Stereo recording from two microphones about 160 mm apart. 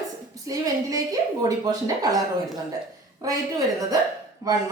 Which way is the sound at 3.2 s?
20° right (ahead or behind).